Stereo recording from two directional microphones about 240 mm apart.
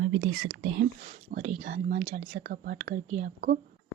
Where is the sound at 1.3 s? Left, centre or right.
Right.